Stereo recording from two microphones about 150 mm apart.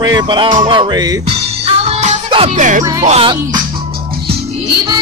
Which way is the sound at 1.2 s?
40° right (ahead or behind).